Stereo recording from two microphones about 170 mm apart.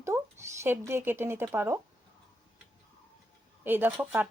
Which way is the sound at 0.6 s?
15° right (ahead or behind).